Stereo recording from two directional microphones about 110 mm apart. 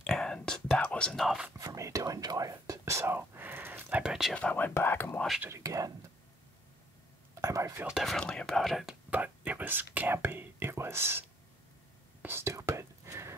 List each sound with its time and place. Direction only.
0.0 s whispering: 5° left (ahead or behind)
1.6 s speech: 30° right (ahead or behind)
4.0 s speech: 5° right (ahead or behind)
4.3 s speech: 10° left (ahead or behind)
5.4 s speech: 25° right (ahead or behind)
7.4 s speech: 25° right (ahead or behind)
7.8 s speech: 5° right (ahead or behind)
9.1 s speech: 15° right (ahead or behind)
12.2 s whispering: 20° right (ahead or behind)